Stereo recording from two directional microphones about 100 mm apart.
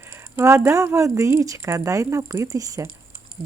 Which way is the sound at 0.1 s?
25° right (ahead or behind).